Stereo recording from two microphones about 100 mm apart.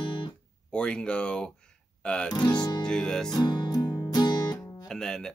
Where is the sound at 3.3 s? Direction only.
45° left (ahead or behind).